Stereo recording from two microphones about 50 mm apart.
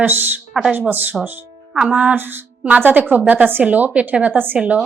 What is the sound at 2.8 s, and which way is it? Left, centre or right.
A woman's voice, right.